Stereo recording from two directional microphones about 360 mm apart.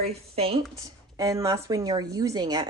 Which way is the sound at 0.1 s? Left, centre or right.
Centre.